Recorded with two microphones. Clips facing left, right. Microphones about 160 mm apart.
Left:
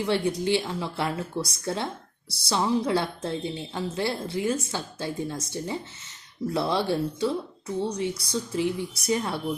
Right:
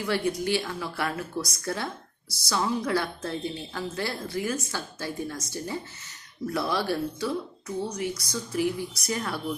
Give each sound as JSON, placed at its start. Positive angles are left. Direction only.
{"t": 0.0, "sound": "a woman's voice", "side_deg": 20}